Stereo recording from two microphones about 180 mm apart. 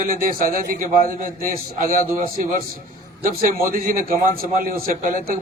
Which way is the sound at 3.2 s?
55° right (ahead or behind).